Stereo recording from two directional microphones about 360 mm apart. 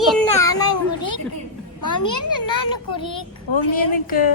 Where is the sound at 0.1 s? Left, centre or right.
Centre.